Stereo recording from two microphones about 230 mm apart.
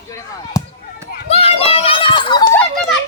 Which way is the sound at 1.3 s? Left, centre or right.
Left.